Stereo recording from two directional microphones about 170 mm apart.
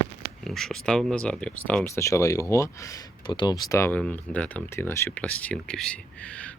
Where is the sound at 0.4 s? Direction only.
Centre (ahead or behind).